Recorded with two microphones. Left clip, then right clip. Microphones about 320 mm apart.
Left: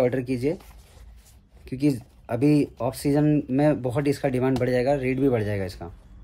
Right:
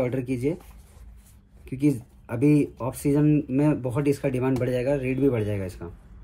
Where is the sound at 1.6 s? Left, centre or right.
Left.